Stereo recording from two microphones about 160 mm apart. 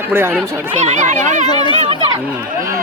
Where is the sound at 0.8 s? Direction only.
45° right (ahead or behind).